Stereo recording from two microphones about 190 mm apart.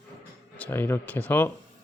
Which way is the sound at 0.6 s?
10° left (ahead or behind).